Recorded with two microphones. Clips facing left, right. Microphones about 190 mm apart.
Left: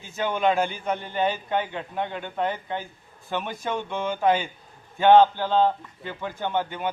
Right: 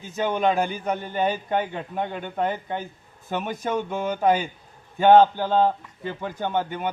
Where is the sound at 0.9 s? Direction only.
45° right (ahead or behind).